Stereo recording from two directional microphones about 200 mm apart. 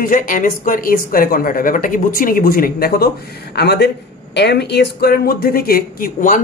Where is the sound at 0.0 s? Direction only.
45° left (ahead or behind).